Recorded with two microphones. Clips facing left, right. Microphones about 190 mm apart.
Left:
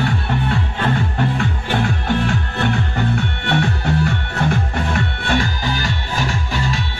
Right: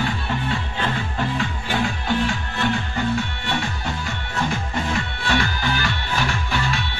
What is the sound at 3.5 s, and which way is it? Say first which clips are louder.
Music: left 7 dB; 60° left (ahead or behind).